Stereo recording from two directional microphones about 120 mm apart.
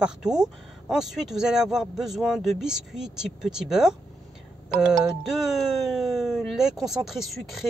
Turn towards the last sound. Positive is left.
turn(degrees=0)  # may be behind; listen again after turning